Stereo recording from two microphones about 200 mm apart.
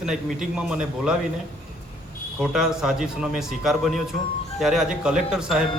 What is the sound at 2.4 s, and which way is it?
A man's voice, centre (ahead or behind).